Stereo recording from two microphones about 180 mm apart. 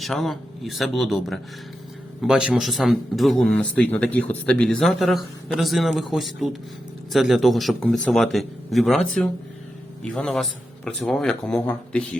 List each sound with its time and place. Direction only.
0.0 s speech: centre (ahead or behind)